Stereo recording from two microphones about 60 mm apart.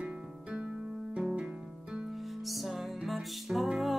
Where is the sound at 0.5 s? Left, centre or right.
Centre.